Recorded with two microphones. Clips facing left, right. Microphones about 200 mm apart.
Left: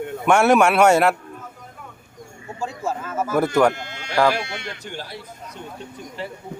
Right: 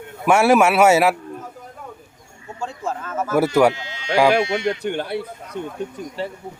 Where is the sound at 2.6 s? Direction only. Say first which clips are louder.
Left 1 dB; 5° left (ahead or behind).